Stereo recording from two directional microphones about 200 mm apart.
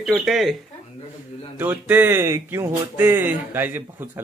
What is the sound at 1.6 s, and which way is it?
A man's voice, 10° right (ahead or behind).